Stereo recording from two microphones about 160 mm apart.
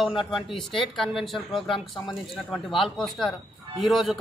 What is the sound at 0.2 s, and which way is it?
Speech, centre (ahead or behind).